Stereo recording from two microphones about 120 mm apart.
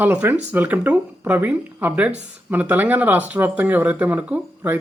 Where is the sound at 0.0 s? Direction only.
15° right (ahead or behind).